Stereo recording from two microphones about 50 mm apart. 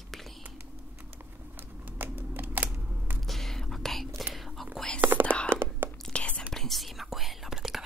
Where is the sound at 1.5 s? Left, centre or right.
Right.